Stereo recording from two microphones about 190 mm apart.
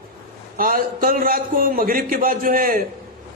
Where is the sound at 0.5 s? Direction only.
45° right (ahead or behind).